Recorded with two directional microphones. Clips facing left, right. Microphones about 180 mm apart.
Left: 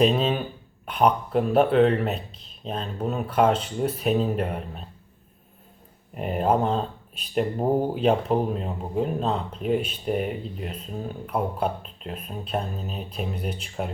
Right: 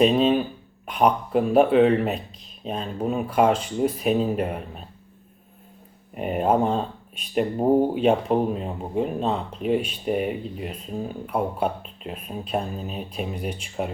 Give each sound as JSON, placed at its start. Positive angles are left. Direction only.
{"t": 0.0, "sound": "speech", "side_deg": 0}
{"t": 6.1, "sound": "speech", "side_deg": -5}